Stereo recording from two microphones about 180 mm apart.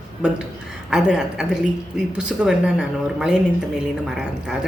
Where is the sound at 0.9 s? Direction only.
5° right (ahead or behind).